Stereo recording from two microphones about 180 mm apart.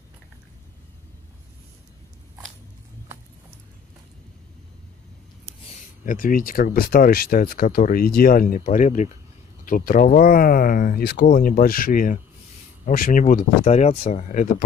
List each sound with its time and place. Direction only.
6.0 s speech: 50° left (ahead or behind)